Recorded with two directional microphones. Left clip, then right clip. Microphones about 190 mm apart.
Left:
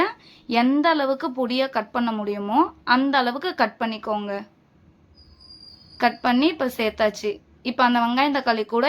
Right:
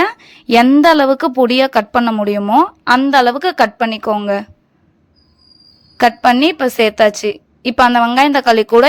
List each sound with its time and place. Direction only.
0.0 s a woman's voice: 45° right (ahead or behind)
6.0 s a woman's voice: 45° right (ahead or behind)